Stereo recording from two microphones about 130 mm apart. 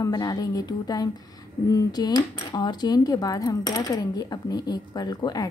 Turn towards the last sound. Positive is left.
turn(degrees=30)  # may be behind; listen again after turning